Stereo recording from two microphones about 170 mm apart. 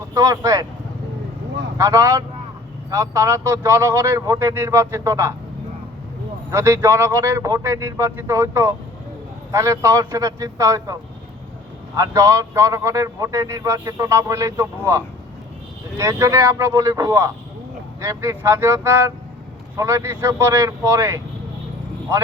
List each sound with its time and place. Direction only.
0.1 s a man's voice: 20° right (ahead or behind)
1.8 s a man's voice: 20° right (ahead or behind)
6.5 s a man's voice: 15° right (ahead or behind)
11.9 s a man's voice: 20° right (ahead or behind)